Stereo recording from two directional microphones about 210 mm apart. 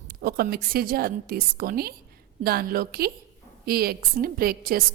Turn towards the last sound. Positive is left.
turn(degrees=-45)  # may be behind; listen again after turning